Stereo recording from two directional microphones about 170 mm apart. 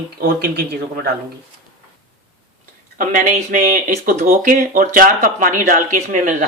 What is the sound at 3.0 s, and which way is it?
Speech, 50° right (ahead or behind).